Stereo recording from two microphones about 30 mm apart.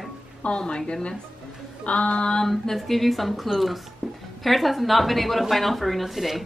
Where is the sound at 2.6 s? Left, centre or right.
Centre.